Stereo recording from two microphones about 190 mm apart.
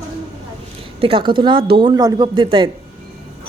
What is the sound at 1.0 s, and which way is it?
Speech, 25° right (ahead or behind).